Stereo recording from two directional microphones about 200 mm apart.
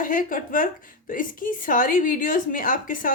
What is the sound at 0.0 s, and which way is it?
A woman's voice, 45° left (ahead or behind).